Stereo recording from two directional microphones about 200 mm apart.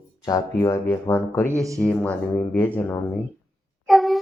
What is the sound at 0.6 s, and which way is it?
Speech, 15° left (ahead or behind).